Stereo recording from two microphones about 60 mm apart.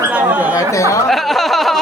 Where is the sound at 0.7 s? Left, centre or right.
Left.